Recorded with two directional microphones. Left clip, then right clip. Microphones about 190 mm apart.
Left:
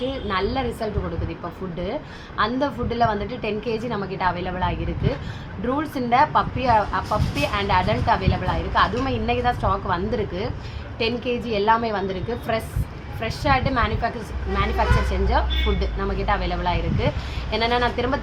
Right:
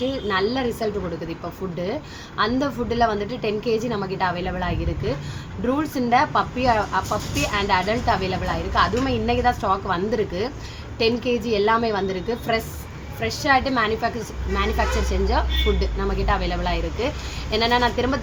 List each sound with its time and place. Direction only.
0.1 s a woman's voice: 5° right (ahead or behind)
2.4 s a woman's voice: 5° right (ahead or behind)